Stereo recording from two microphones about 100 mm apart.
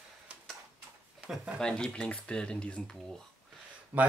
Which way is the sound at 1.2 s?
10° right (ahead or behind).